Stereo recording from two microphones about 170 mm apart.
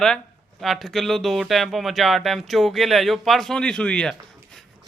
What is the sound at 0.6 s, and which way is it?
A man's voice, centre (ahead or behind).